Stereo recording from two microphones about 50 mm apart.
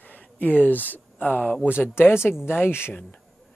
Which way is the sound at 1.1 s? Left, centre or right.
Left.